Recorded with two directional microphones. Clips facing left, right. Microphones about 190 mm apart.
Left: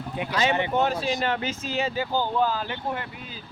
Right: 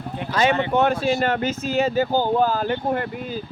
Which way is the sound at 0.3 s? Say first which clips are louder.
Right 5 dB; 50° right (ahead or behind).